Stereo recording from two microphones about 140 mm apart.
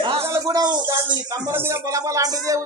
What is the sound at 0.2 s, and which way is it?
Speech, 20° right (ahead or behind).